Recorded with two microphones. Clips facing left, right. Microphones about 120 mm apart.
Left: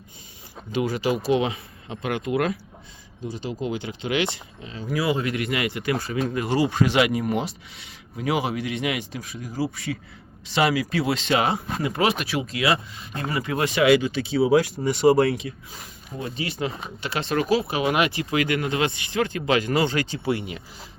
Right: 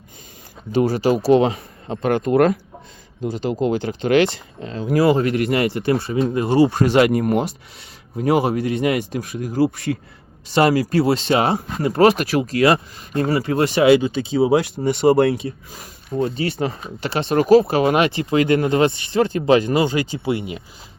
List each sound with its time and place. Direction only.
0.7 s speech: 35° right (ahead or behind)
6.7 s speech: 45° right (ahead or behind); by 14.8 s 30° right (ahead or behind)
14.8 s speech: 60° right (ahead or behind)
15.1 s speech: 30° right (ahead or behind)
17.5 s speech: 45° right (ahead or behind)
19.6 s speech: 20° right (ahead or behind)